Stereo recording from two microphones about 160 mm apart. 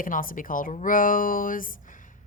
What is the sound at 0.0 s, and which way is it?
Speech, 60° left (ahead or behind).